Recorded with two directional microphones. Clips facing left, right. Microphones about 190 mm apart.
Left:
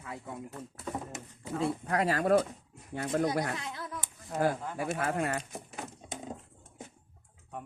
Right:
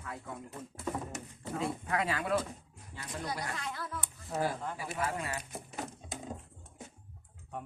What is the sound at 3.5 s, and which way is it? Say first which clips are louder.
Speech: left 1 dB; 20° left (ahead or behind).